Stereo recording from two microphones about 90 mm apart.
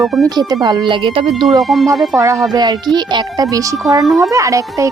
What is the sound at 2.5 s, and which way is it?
Speech, 50° right (ahead or behind).